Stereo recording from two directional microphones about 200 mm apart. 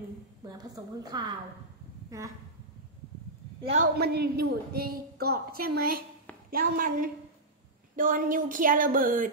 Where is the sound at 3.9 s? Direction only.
50° right (ahead or behind).